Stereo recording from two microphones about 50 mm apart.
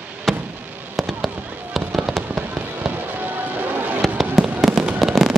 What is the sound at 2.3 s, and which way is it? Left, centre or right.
Fireworks, right.